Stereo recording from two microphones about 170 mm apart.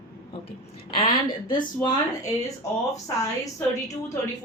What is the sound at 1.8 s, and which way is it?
A woman's voice, 20° left (ahead or behind).